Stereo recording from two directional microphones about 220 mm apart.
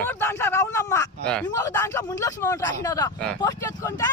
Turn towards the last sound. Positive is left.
turn(degrees=15)  # may be behind; listen again after turning